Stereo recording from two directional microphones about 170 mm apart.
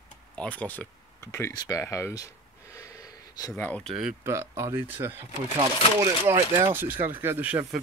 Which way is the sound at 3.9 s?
5° right (ahead or behind).